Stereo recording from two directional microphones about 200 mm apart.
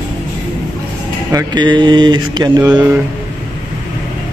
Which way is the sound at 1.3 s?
20° right (ahead or behind).